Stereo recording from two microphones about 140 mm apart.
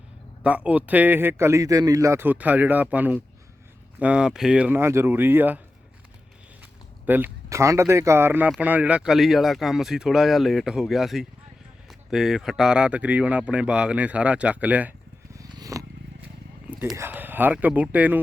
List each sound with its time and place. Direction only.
0.4 s speech: 10° right (ahead or behind)
6.6 s speech: 10° right (ahead or behind)
15.3 s a sound: 25° right (ahead or behind)
17.1 s speech: 15° right (ahead or behind)